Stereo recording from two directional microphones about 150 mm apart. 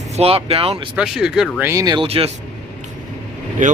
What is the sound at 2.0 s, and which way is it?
Speech, 40° right (ahead or behind).